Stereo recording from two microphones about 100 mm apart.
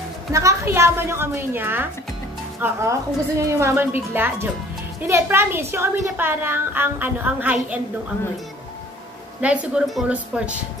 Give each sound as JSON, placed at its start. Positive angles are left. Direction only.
{"t": 0.3, "sound": "a woman's voice", "side_deg": -30}
{"t": 9.4, "sound": "a woman's voice", "side_deg": -10}